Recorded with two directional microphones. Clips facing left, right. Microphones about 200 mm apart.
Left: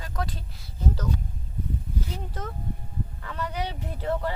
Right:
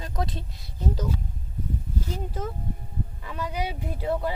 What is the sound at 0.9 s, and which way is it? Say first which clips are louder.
Speech: right 1 dB; 5° right (ahead or behind).